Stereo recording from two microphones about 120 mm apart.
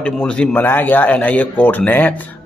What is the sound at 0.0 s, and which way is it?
Speech, 10° left (ahead or behind).